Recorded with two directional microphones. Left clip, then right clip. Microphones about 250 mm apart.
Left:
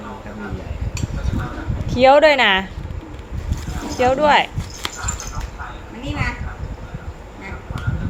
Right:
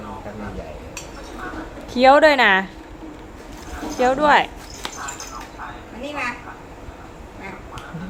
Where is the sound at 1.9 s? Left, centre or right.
Centre.